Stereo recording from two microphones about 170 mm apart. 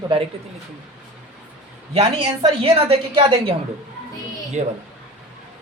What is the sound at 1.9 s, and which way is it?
A woman's voice, 30° right (ahead or behind).